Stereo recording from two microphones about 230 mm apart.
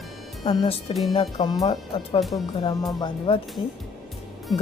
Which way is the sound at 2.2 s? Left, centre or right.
Centre.